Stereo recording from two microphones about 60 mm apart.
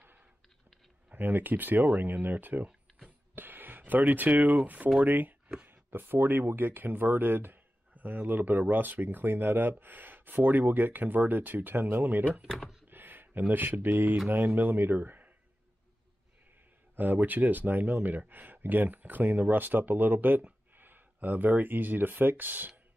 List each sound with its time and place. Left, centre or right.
1.1 s speech: right
3.3 s a sound: right
4.6 s speech: right
12.8 s a sound: right
14.3 s speech: right
16.9 s speech: right